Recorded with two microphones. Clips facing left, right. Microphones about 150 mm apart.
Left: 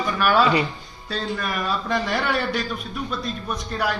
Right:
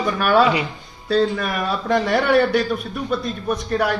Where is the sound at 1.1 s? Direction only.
65° right (ahead or behind).